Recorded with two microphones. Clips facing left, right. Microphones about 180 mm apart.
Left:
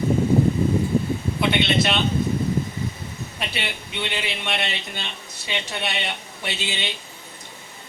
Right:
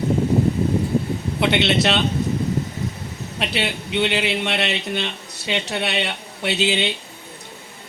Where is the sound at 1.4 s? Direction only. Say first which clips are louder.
Right 3 dB; 70° right (ahead or behind).